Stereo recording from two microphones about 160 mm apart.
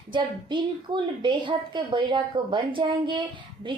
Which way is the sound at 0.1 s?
30° right (ahead or behind).